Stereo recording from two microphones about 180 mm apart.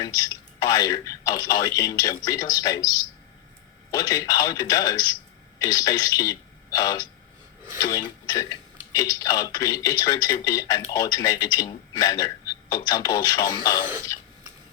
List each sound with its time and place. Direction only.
0.0 s speech: 20° left (ahead or behind)
3.9 s a man's voice: 20° left (ahead or behind)
14.1 s cough: 20° left (ahead or behind)